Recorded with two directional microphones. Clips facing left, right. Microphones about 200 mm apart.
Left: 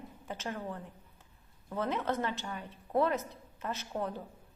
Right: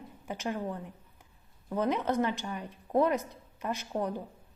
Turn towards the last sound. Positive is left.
turn(degrees=-15)  # may be behind; listen again after turning